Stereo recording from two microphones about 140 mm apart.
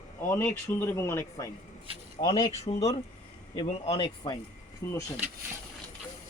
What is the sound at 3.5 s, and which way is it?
Speech, 45° left (ahead or behind).